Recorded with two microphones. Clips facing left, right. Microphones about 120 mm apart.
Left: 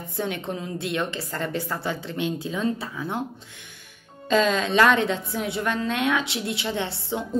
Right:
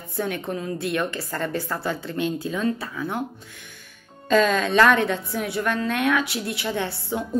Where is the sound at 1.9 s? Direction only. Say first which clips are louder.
Right 2 dB; 50° right (ahead or behind).